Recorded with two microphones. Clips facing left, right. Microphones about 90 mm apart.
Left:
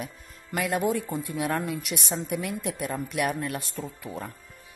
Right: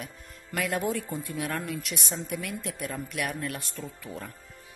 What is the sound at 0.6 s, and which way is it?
Speech, 10° left (ahead or behind).